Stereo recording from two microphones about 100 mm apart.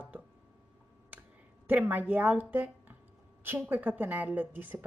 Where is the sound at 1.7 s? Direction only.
20° right (ahead or behind).